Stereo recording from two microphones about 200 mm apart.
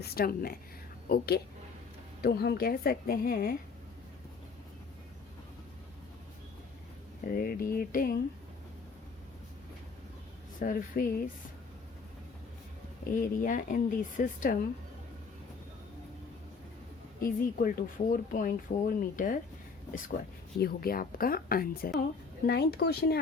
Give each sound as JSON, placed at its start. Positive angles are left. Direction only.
{"t": 0.0, "sound": "speech", "side_deg": 50}
{"t": 7.3, "sound": "speech", "side_deg": 45}
{"t": 10.6, "sound": "speech", "side_deg": 45}
{"t": 13.1, "sound": "speech", "side_deg": 40}
{"t": 17.2, "sound": "speech", "side_deg": 45}
{"t": 20.6, "sound": "speech", "side_deg": 50}